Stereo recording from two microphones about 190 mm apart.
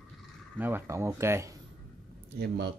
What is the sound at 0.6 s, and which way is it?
Speech, 10° right (ahead or behind).